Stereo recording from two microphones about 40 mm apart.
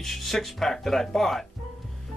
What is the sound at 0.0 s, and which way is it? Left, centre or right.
Speech, centre.